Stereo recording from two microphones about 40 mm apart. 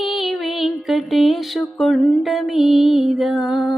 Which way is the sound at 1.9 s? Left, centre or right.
Left.